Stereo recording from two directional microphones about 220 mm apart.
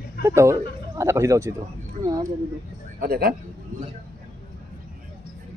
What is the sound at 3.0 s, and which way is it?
Speech, 45° right (ahead or behind).